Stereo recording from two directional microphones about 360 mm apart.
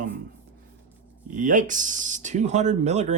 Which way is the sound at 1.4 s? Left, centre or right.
Right.